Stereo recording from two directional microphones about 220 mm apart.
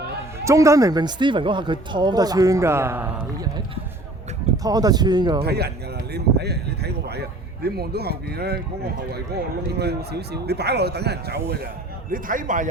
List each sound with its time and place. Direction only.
0.4 s speech: 15° right (ahead or behind)
4.5 s speech: 15° right (ahead or behind)
5.4 s speech: 45° right (ahead or behind)
12.1 s a man's voice: 40° right (ahead or behind)